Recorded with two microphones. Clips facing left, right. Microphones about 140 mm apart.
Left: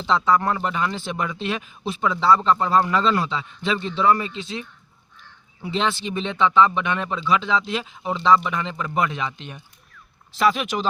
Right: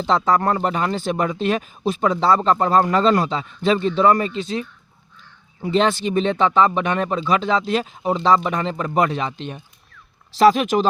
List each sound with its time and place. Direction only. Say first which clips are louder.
0.0 s speech: right 2 dB; 45° right (ahead or behind)
5.6 s speech: right 6 dB; 45° right (ahead or behind)